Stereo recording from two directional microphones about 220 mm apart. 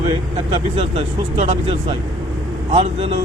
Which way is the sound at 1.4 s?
30° right (ahead or behind).